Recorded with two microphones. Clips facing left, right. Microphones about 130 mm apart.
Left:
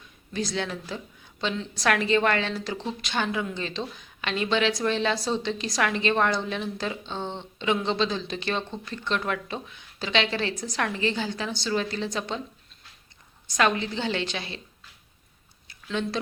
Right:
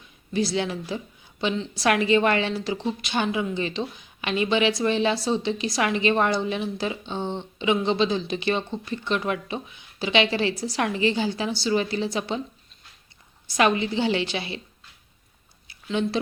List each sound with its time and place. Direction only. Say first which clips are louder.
0.5 s a woman's voice: right 4 dB; 15° right (ahead or behind)
13.5 s a woman's voice: right 3 dB; 15° right (ahead or behind)
15.9 s a woman's voice: right 4 dB; 15° right (ahead or behind)